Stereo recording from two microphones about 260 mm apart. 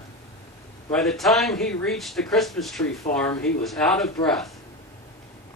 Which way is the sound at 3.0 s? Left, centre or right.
Left.